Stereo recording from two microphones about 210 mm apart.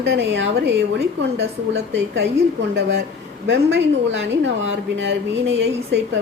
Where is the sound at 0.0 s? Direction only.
60° right (ahead or behind).